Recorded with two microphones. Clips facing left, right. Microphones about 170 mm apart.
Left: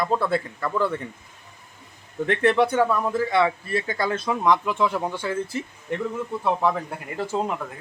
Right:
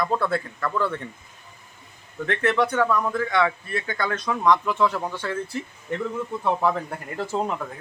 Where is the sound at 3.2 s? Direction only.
30° left (ahead or behind).